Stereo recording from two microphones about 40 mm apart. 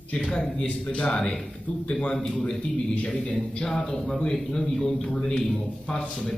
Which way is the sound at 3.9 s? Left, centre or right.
Centre.